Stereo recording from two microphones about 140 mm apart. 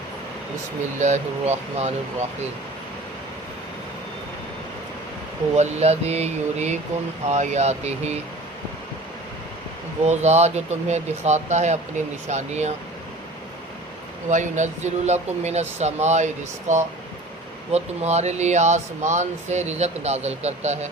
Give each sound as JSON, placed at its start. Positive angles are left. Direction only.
{"t": 0.9, "sound": "speech", "side_deg": -55}
{"t": 5.5, "sound": "speech", "side_deg": -50}
{"t": 10.0, "sound": "speech", "side_deg": -50}
{"t": 14.3, "sound": "speech", "side_deg": -60}